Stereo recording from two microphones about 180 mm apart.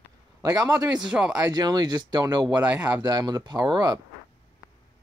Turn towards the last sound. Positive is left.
turn(degrees=-20)  # may be behind; listen again after turning